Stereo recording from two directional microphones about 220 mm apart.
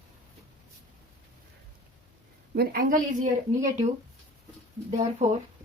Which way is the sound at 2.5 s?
45° right (ahead or behind).